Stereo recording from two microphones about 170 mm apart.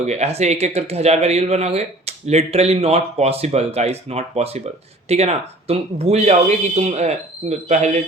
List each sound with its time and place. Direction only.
0.0 s speech: 40° right (ahead or behind)